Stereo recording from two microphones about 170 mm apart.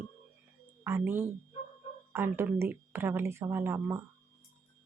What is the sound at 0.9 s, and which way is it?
Speech, 15° right (ahead or behind).